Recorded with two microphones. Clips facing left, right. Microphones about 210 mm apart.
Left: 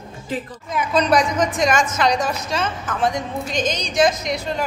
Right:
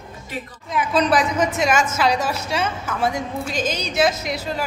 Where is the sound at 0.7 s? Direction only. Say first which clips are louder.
Left 1 dB; 5° right (ahead or behind).